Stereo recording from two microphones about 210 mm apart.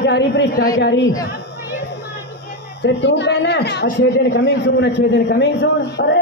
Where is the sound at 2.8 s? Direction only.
55° left (ahead or behind).